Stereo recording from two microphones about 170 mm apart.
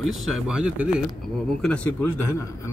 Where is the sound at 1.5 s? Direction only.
5° left (ahead or behind).